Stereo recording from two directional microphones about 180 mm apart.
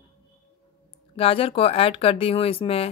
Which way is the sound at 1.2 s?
30° left (ahead or behind).